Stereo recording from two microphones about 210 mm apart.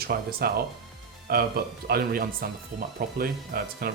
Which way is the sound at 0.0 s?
45° right (ahead or behind).